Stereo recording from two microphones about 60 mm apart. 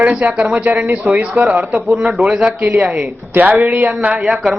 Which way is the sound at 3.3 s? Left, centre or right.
Right.